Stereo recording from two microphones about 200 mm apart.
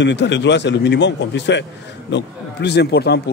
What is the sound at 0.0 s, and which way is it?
A man's voice, 60° left (ahead or behind).